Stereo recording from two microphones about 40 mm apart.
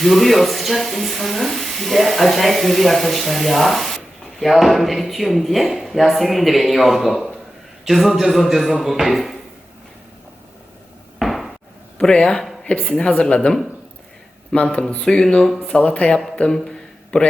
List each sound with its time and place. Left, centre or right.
0.0 s speech: centre
11.2 s knock: centre
11.9 s a man's voice: centre
12.6 s speech: left
14.5 s speech: left
15.0 s a man's voice: centre
15.8 s speech: left
16.5 s a sound: centre